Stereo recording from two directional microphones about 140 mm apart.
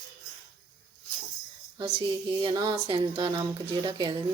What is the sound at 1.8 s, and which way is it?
Speech, 40° right (ahead or behind).